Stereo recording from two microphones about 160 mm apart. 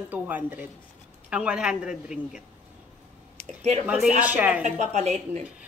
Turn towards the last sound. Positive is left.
turn(degrees=-45)  # may be behind; listen again after turning